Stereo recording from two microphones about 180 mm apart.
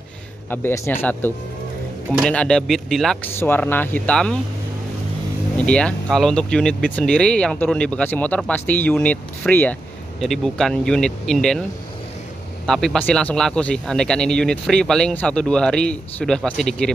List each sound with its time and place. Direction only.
0.5 s a man's voice: 10° left (ahead or behind)
5.6 s a man's voice: 5° left (ahead or behind)
12.6 s a man's voice: centre (ahead or behind)